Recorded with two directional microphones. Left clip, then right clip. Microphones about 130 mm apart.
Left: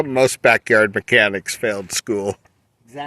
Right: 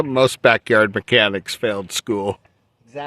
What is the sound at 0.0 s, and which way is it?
Speech, 70° right (ahead or behind).